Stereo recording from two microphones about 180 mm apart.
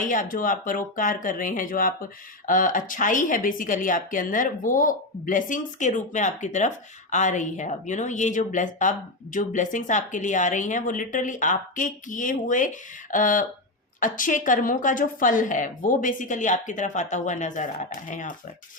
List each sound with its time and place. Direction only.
0.0 s speech: 45° left (ahead or behind)